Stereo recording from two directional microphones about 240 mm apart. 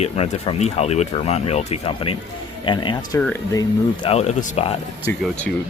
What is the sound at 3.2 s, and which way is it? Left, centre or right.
Speech, centre.